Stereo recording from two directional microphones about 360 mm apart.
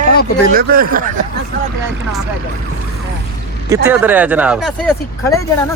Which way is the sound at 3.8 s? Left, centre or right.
Centre.